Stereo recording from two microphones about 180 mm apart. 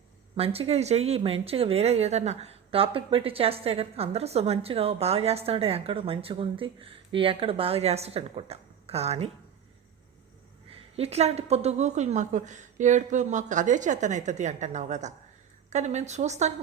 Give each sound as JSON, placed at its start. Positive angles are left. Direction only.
{"t": 0.3, "sound": "speech", "side_deg": -35}
{"t": 10.7, "sound": "speech", "side_deg": -35}